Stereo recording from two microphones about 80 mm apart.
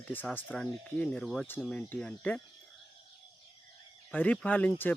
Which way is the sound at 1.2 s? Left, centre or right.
Centre.